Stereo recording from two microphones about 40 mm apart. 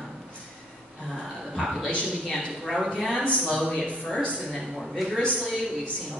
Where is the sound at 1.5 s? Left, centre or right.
Centre.